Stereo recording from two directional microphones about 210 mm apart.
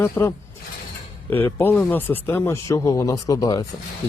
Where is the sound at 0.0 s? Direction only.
10° left (ahead or behind).